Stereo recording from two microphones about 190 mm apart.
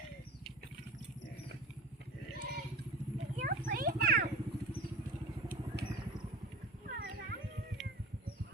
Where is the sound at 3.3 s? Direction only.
50° right (ahead or behind).